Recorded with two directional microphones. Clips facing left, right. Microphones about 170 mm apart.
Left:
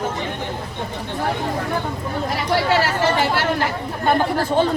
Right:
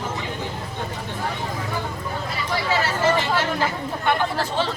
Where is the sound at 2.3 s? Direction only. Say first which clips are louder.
Left 6 dB; 65° left (ahead or behind).